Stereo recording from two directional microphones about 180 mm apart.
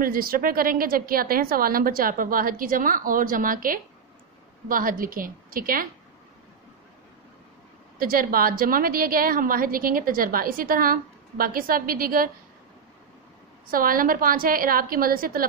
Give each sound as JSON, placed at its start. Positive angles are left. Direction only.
{"t": 0.0, "sound": "a woman's voice", "side_deg": -55}
{"t": 8.0, "sound": "a woman's voice", "side_deg": -55}
{"t": 13.7, "sound": "a woman's voice", "side_deg": -50}